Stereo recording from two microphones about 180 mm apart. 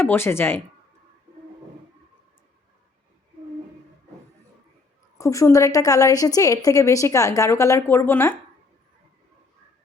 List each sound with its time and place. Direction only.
0.0 s a woman's voice: 10° left (ahead or behind)
5.1 s a woman's voice: 15° left (ahead or behind)